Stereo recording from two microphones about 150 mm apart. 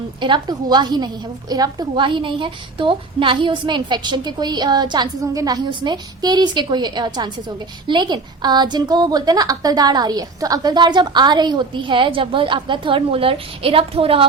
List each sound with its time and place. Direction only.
0.2 s a woman's voice: 30° right (ahead or behind)